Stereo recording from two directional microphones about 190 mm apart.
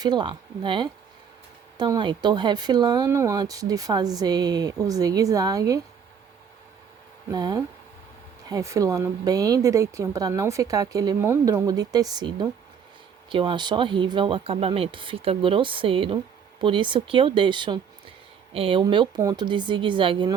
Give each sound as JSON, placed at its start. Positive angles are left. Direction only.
{"t": 0.0, "sound": "speech", "side_deg": -20}
{"t": 7.3, "sound": "speech", "side_deg": -20}